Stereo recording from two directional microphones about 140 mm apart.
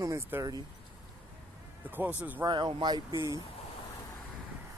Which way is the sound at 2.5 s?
35° right (ahead or behind).